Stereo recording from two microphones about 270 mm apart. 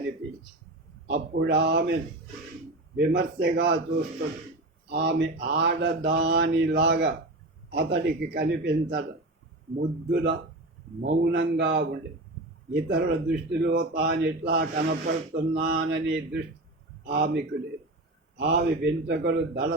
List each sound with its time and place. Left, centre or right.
1.0 s speech: right
4.9 s speech: right